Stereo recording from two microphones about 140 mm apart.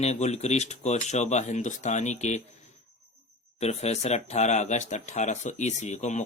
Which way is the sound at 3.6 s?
50° left (ahead or behind).